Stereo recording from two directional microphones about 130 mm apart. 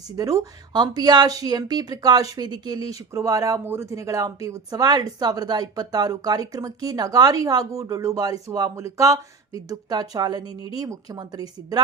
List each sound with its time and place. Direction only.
0.2 s speech: 25° right (ahead or behind)